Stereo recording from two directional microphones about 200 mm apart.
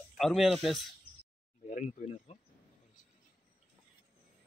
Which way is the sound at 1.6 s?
35° left (ahead or behind).